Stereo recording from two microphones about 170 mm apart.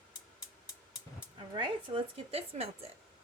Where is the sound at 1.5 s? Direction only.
30° right (ahead or behind).